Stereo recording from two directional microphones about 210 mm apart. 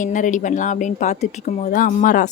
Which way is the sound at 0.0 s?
35° left (ahead or behind).